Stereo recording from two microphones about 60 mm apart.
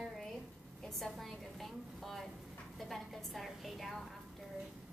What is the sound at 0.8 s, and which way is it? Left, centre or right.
A woman's voice, centre.